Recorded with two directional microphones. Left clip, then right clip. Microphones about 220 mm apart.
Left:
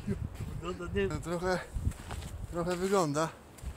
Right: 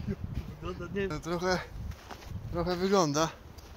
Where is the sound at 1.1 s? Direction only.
30° right (ahead or behind).